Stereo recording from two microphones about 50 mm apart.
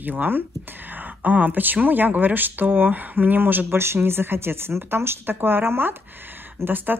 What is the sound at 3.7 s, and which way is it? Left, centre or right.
Speech, right.